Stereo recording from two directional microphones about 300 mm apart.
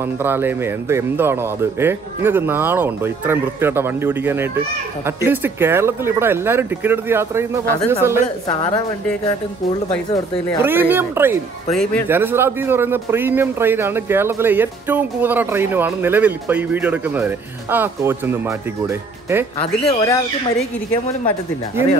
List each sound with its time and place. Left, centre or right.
0.0 s speech: centre
10.6 s speech: centre
11.7 s speech: centre
12.1 s speech: centre
19.6 s speech: centre